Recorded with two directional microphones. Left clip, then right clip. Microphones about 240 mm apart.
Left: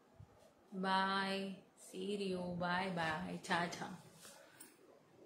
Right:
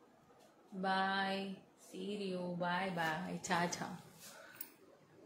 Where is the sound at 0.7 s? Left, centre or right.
Centre.